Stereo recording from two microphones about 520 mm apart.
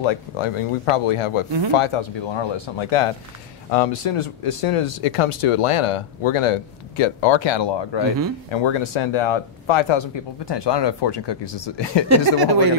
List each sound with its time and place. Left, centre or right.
0.0 s speech: left
3.7 s speech: left
10.5 s speech: left
12.3 s speech: right